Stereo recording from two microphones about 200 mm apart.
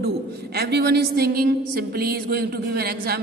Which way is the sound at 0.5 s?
55° right (ahead or behind).